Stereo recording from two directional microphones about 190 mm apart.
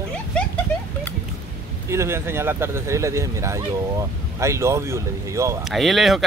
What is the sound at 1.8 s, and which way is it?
Speech, 15° right (ahead or behind).